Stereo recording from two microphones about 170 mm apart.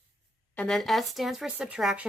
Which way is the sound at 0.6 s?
Centre (ahead or behind).